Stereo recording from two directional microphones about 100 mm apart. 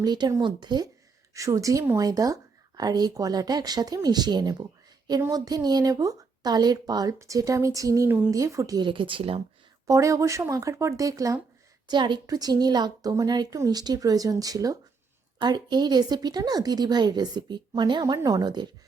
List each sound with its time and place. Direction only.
0.0 s a woman's voice: 45° right (ahead or behind)
1.3 s speech: 35° right (ahead or behind)
8.8 s speech: 55° right (ahead or behind)
9.8 s speech: 30° right (ahead or behind)
11.9 s a woman's voice: 50° right (ahead or behind)
12.2 s a woman's voice: 40° right (ahead or behind)
18.0 s speech: 35° right (ahead or behind)